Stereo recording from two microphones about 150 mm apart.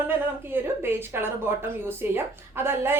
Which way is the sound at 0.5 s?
15° right (ahead or behind).